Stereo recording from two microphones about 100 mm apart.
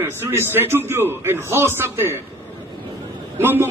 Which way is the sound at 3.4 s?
20° right (ahead or behind).